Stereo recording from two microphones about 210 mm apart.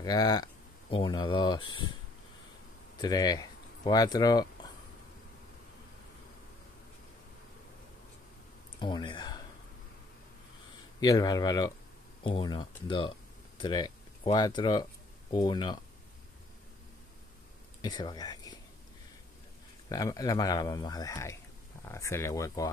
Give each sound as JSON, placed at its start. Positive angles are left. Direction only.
{"t": 0.0, "sound": "speech", "side_deg": 20}
{"t": 3.0, "sound": "speech", "side_deg": 20}
{"t": 8.8, "sound": "speech", "side_deg": 20}
{"t": 11.0, "sound": "speech", "side_deg": 20}
{"t": 17.8, "sound": "speech", "side_deg": 20}
{"t": 19.9, "sound": "speech", "side_deg": 15}